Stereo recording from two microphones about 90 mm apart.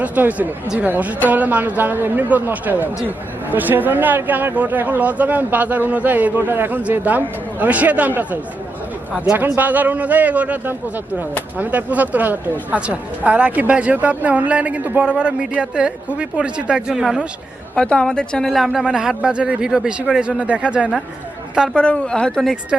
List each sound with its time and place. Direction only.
0.0 s speech: 15° right (ahead or behind)
17.7 s a man's voice: 10° left (ahead or behind); by 21.8 s 5° right (ahead or behind)
21.8 s speech: 15° left (ahead or behind)